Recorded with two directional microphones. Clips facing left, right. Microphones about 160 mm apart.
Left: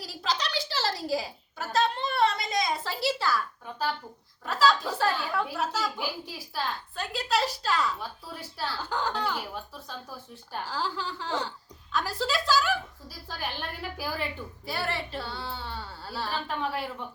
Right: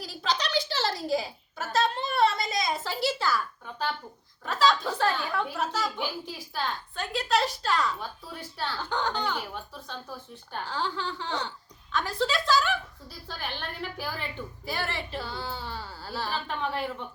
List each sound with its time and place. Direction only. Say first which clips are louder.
0.0 s a sound: right 1 dB; centre (ahead or behind)
4.4 s a woman's voice: even; 5° left (ahead or behind)
10.5 s a woman's voice: even; 5° left (ahead or behind)
13.9 s a woman's voice: left 2 dB; 10° left (ahead or behind)